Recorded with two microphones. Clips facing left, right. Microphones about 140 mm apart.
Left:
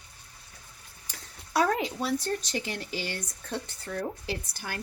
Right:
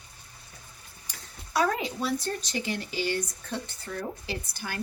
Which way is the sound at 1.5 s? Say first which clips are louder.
Left 1 dB; 60° left (ahead or behind).